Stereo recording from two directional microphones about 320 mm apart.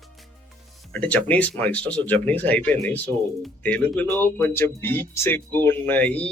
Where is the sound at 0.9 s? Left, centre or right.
Centre.